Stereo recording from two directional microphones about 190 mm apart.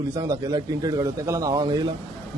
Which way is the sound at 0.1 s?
20° right (ahead or behind).